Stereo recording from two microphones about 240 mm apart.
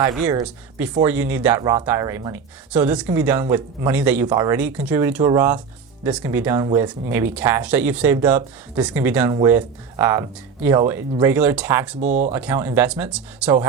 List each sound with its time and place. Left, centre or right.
0.0 s speech: centre
11.9 s speech: right
12.3 s speech: centre